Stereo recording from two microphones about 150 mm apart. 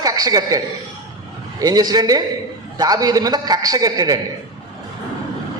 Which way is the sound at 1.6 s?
25° right (ahead or behind).